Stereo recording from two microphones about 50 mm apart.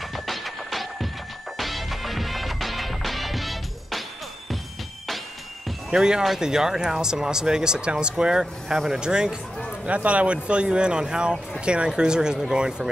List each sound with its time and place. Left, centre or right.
0.1 s music: centre
5.9 s speech: centre
9.8 s speech: right